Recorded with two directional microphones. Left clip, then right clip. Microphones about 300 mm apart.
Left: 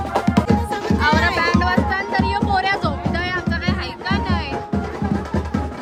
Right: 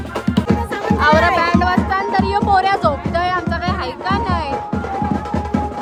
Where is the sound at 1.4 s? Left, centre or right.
Right.